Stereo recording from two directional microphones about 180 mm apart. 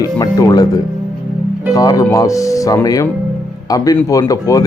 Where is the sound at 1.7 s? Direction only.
20° left (ahead or behind).